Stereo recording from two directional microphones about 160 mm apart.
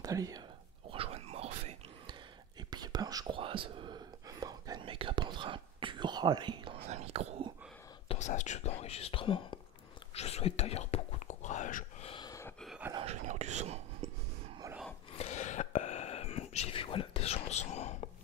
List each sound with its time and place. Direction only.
0.0 s speech: 20° right (ahead or behind)
0.8 s whispering: 35° right (ahead or behind)
2.7 s whispering: 25° right (ahead or behind)
6.9 s whispering: 40° right (ahead or behind)
8.1 s whispering: 50° left (ahead or behind)
12.1 s a sound: 25° left (ahead or behind)
12.6 s dog: 5° right (ahead or behind)
13.0 s a sound: 45° right (ahead or behind)
15.1 s whispering: 45° left (ahead or behind)